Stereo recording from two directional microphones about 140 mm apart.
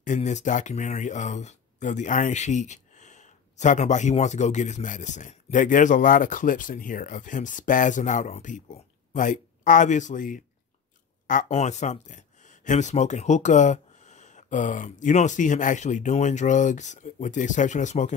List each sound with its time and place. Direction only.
0.0 s speech: 60° left (ahead or behind)